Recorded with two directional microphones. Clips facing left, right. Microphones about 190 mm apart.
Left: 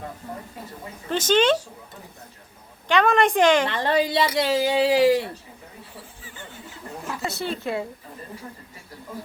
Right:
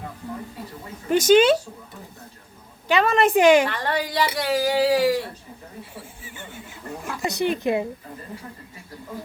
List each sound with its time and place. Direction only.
1.1 s a woman's voice: 10° right (ahead or behind)
2.8 s a woman's voice: 5° right (ahead or behind)
3.7 s speech: 25° left (ahead or behind)
5.9 s snake: 15° right (ahead or behind)
7.2 s a woman's voice: 15° right (ahead or behind)